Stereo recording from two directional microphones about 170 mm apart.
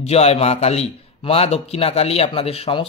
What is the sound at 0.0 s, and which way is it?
A man's voice, 40° left (ahead or behind).